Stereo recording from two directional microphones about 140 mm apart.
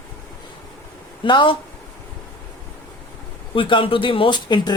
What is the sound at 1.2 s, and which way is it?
Speech, 35° left (ahead or behind).